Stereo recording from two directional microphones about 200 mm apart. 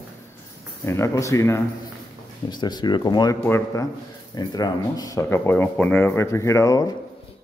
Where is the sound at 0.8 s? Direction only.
15° left (ahead or behind).